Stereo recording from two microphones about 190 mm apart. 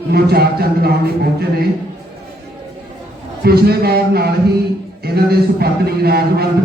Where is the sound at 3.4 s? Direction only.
55° right (ahead or behind).